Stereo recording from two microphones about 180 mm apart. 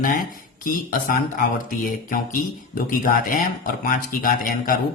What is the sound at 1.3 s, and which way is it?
Music, 50° left (ahead or behind).